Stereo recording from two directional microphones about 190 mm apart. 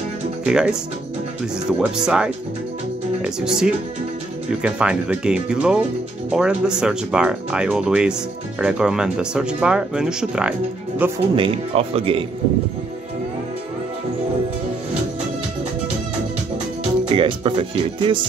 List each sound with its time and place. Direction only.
0.5 s speech: 5° right (ahead or behind)
3.3 s speech: 5° right (ahead or behind)
11.3 s speech: 30° right (ahead or behind)
17.1 s speech: 25° right (ahead or behind)